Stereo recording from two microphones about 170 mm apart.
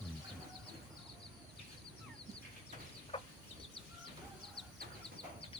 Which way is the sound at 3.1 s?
30° left (ahead or behind).